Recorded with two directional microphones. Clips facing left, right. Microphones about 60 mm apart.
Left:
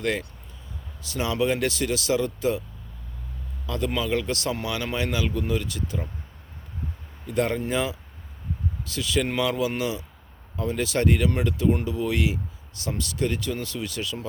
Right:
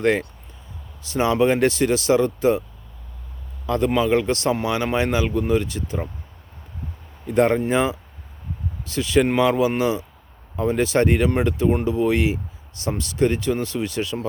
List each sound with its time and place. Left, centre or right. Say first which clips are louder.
0.0 s speech: right 7 dB; right
3.7 s speech: right 7 dB; right
7.3 s speech: right 7 dB; right